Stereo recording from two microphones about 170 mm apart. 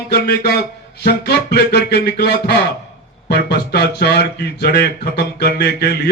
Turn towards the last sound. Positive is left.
turn(degrees=75)  # may be behind; listen again after turning